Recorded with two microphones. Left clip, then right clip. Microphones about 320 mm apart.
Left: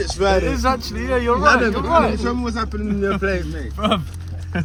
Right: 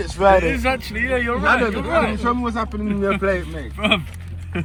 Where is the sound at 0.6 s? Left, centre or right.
Centre.